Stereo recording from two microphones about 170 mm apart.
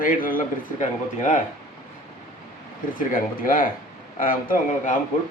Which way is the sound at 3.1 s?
55° left (ahead or behind).